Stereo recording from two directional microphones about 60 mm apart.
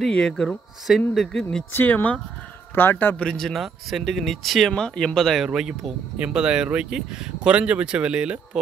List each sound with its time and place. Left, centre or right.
0.1 s speech: centre
1.7 s speech: left
3.2 s speech: centre
3.4 s speech: centre
5.4 s speech: centre